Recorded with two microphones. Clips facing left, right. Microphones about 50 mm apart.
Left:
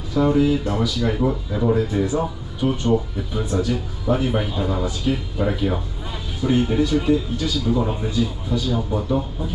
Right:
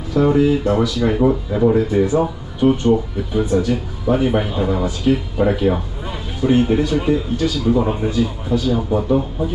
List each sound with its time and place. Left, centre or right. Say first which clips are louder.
0.1 s speech: right 3 dB; right